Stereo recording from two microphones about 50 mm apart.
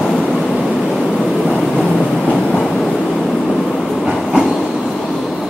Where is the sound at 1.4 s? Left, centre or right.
Centre.